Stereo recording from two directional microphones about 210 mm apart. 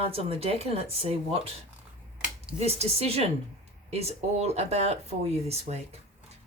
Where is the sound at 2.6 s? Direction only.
30° right (ahead or behind).